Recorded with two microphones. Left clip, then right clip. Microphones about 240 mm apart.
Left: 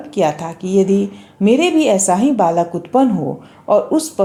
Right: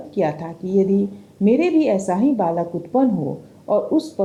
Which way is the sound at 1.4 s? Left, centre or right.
Centre.